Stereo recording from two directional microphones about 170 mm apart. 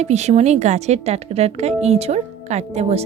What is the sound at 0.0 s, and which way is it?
A woman's voice, 40° right (ahead or behind).